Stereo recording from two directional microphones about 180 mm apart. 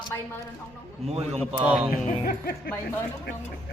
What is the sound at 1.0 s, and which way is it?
Speech, 35° right (ahead or behind).